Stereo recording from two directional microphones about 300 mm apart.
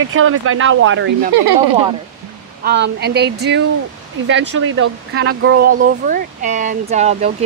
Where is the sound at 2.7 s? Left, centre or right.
Right.